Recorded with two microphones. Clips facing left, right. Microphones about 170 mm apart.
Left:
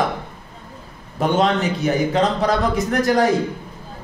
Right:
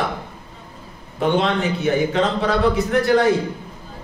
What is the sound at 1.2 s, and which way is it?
A man's voice, 40° left (ahead or behind).